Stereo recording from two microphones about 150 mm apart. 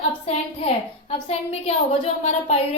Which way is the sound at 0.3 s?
40° left (ahead or behind).